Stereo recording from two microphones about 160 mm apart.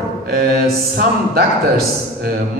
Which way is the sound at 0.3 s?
70° right (ahead or behind).